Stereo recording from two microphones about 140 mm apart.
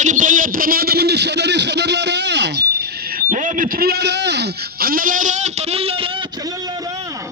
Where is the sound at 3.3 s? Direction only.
65° right (ahead or behind); by 4.0 s 90° right.